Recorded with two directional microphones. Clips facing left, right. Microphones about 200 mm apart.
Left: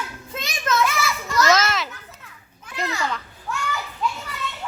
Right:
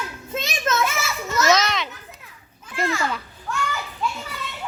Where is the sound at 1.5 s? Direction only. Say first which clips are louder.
Right 2 dB; 5° left (ahead or behind).